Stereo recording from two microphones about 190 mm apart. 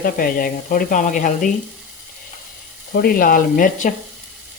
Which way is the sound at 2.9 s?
50° left (ahead or behind).